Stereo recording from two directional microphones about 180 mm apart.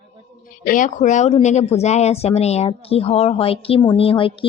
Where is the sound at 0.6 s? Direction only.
50° left (ahead or behind).